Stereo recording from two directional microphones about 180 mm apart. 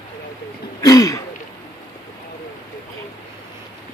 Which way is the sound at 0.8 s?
20° left (ahead or behind).